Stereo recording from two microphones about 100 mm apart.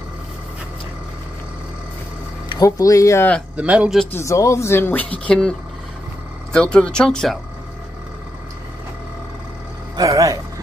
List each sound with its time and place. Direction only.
2.6 s speech: 35° left (ahead or behind)
3.5 s speech: 15° right (ahead or behind)
4.1 s speech: 30° left (ahead or behind); by 7.3 s 5° left (ahead or behind)
9.9 s speech: 35° right (ahead or behind)